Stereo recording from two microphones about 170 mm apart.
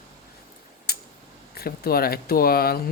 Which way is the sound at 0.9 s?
65° left (ahead or behind).